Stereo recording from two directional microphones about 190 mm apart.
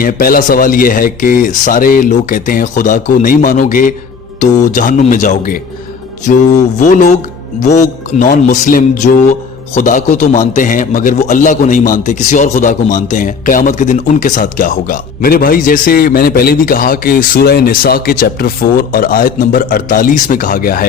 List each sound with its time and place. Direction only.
0.0 s a man's voice: 50° left (ahead or behind)
6.8 s a man's voice: 40° left (ahead or behind)